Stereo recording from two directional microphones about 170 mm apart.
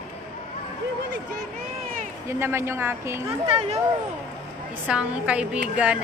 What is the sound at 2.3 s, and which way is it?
Speech, 15° right (ahead or behind).